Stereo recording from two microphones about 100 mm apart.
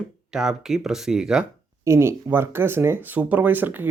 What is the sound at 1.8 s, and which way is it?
Speech, 25° right (ahead or behind).